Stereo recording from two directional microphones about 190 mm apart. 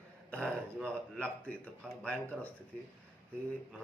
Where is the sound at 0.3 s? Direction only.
5° left (ahead or behind).